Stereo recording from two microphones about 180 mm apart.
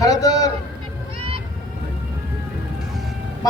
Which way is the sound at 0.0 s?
20° left (ahead or behind).